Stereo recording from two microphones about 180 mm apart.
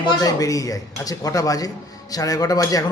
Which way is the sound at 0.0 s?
20° left (ahead or behind).